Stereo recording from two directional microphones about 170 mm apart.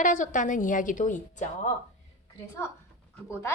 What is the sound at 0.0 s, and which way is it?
A woman's voice, 50° left (ahead or behind).